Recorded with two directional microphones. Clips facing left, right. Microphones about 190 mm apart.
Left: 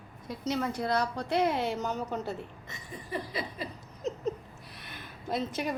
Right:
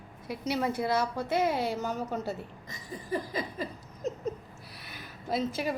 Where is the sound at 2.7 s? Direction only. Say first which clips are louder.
Right 4 dB; 40° right (ahead or behind).